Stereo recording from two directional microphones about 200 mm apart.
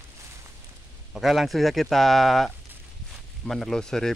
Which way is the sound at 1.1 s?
Centre (ahead or behind).